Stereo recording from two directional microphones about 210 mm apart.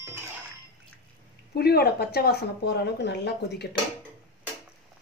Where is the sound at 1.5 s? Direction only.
50° left (ahead or behind).